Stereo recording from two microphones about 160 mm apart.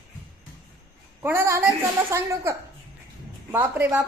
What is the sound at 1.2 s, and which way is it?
A woman's voice, 15° right (ahead or behind).